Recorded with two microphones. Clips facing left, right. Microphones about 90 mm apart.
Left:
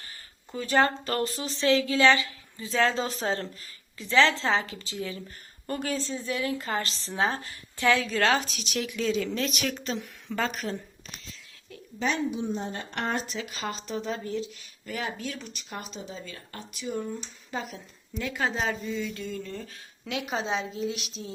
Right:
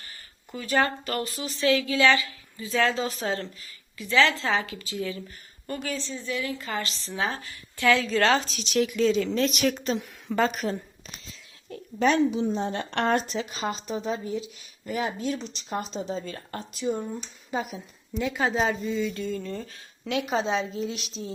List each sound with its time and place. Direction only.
0.5 s a woman's voice: 25° left (ahead or behind)
5.6 s a woman's voice: 50° left (ahead or behind); by 7.5 s 30° left (ahead or behind)
7.8 s a woman's voice: 15° left (ahead or behind)
8.0 s a woman's voice: 5° left (ahead or behind)
11.9 s a woman's voice: 60° right (ahead or behind); by 13.2 s 75° right (ahead or behind)
13.2 s speech: 35° right (ahead or behind)
13.5 s speech: 20° right (ahead or behind)
14.8 s speech: 20° right (ahead or behind)
16.9 s a woman's voice: 15° right (ahead or behind); by 21.3 s 5° left (ahead or behind)